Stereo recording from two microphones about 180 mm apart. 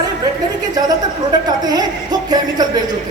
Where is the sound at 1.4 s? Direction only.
20° right (ahead or behind).